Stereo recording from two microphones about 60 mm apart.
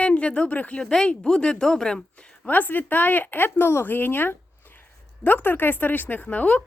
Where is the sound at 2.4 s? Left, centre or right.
Left.